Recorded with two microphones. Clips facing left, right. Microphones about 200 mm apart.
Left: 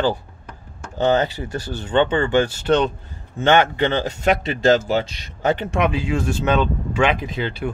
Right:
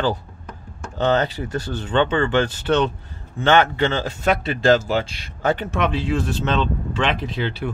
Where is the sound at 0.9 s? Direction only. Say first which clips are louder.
Left 1 dB; 15° left (ahead or behind).